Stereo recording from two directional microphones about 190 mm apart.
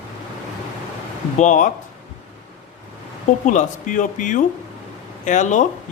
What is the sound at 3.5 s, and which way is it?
Speech, 40° left (ahead or behind).